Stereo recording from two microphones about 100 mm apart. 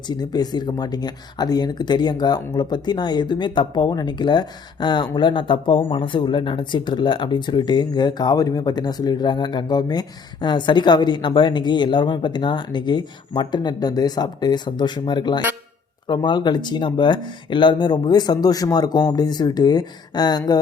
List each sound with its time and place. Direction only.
0.1 s speech: 45° left (ahead or behind)